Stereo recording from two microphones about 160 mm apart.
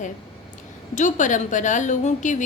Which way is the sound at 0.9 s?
50° left (ahead or behind).